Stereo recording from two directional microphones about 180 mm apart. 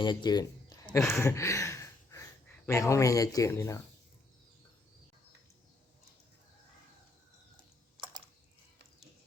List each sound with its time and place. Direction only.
0.0 s speech: 25° left (ahead or behind)
1.2 s a sound: 15° left (ahead or behind)
2.6 s speech: 15° left (ahead or behind)